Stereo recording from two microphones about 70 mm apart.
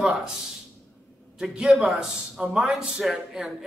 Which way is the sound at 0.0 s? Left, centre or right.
Centre.